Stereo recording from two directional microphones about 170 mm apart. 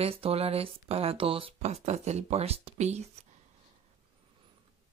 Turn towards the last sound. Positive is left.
turn(degrees=-40)  # may be behind; listen again after turning